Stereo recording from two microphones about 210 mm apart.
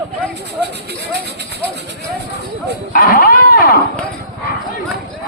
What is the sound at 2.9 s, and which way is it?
Horse, 45° left (ahead or behind).